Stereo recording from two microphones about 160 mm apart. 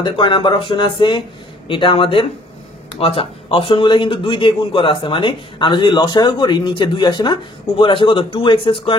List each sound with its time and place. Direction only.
0.0 s a man's voice: 30° left (ahead or behind)